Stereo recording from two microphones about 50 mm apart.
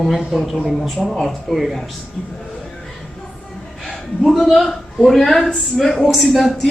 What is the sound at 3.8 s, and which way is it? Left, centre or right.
A man's voice, centre.